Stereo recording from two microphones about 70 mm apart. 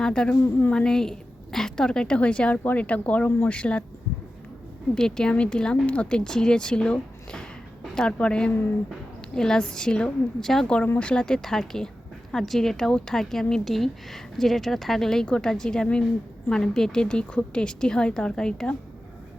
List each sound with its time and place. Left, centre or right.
0.0 s a woman's voice: centre
4.9 s a woman's voice: centre